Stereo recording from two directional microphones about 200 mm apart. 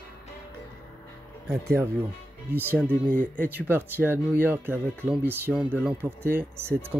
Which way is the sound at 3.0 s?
40° right (ahead or behind).